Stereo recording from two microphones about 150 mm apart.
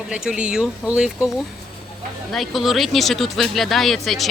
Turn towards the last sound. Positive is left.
turn(degrees=0)  # may be behind; listen again after turning